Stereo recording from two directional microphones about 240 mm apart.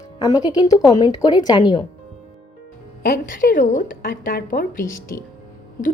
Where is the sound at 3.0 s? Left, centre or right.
Left.